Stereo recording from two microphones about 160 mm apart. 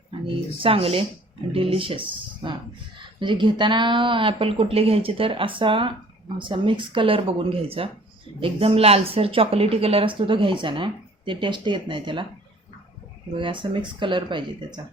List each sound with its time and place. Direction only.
0.6 s a woman's voice: 35° right (ahead or behind)
13.3 s a woman's voice: 30° right (ahead or behind)